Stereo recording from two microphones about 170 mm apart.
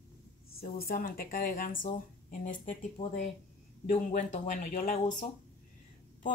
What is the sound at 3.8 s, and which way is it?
Speech, 45° left (ahead or behind).